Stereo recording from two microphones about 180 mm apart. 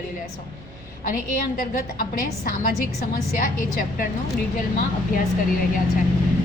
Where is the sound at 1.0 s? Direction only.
50° left (ahead or behind).